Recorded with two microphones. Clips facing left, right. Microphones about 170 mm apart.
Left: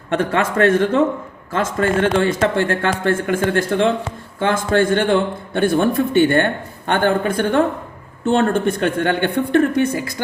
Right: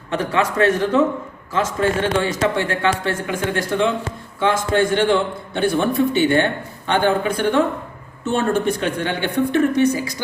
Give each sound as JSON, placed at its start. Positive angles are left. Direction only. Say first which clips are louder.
{"t": 0.1, "sound": "speech", "louder": "left 2 dB", "side_deg": 55}